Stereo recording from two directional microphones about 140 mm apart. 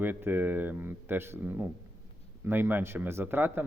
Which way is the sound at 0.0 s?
15° right (ahead or behind).